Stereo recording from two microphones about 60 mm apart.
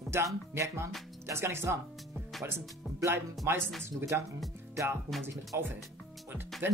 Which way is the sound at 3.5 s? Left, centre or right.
Right.